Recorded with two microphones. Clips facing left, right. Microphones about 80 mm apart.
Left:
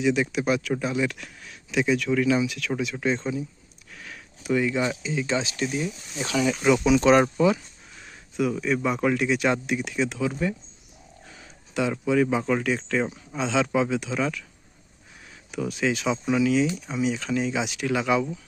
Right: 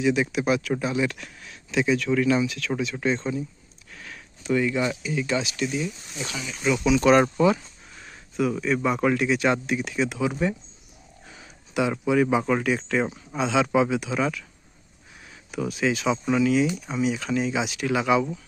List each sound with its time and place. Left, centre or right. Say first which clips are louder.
0.0 s speech: even; centre
3.9 s a sound: even; centre
4.4 s speech: even; centre; by 7.0 s left
7.0 s speech: right 2 dB; centre
7.3 s speech: right 1 dB; centre
8.6 s speech: right 2 dB; centre
10.2 s speech: right 1 dB; centre
15.5 s speech: right 1 dB; centre